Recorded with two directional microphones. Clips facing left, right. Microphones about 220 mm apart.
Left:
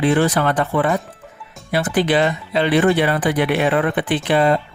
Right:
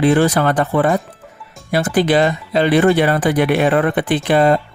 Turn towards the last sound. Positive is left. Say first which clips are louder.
# right 3 dB
turn(degrees=-45)  # may be behind; listen again after turning